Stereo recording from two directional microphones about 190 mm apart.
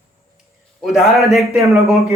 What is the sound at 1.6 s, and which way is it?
Speech, 15° right (ahead or behind).